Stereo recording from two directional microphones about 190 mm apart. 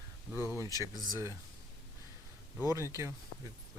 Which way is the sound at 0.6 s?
15° right (ahead or behind).